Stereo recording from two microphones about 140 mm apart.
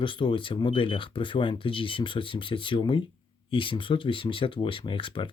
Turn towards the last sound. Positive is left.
turn(degrees=35)  # may be behind; listen again after turning